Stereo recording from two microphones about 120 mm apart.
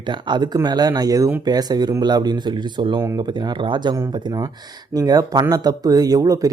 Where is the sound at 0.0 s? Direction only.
40° right (ahead or behind).